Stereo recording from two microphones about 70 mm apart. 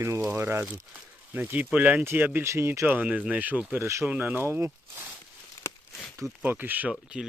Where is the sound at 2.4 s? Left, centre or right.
Right.